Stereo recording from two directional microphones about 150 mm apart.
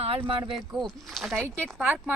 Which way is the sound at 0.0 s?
35° right (ahead or behind).